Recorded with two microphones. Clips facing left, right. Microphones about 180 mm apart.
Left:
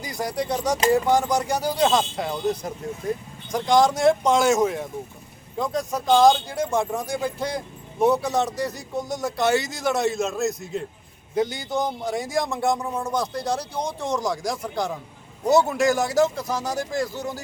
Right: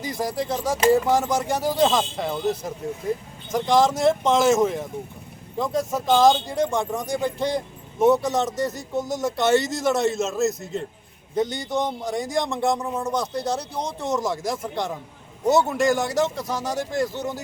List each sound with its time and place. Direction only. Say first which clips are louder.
0.0 s speech: right 1 dB; centre (ahead or behind)